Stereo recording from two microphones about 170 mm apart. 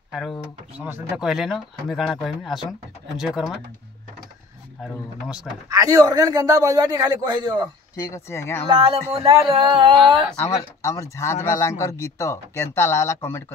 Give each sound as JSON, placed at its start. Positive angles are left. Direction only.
{"t": 0.1, "sound": "speech", "side_deg": 0}
{"t": 5.7, "sound": "a man's voice", "side_deg": -20}
{"t": 7.9, "sound": "speech", "side_deg": 20}
{"t": 8.6, "sound": "a man's voice", "side_deg": -30}
{"t": 10.8, "sound": "speech", "side_deg": 15}